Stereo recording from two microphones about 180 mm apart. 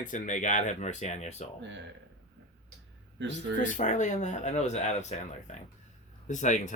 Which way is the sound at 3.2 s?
80° right.